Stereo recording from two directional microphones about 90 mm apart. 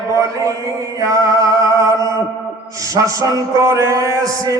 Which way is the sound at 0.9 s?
40° right (ahead or behind).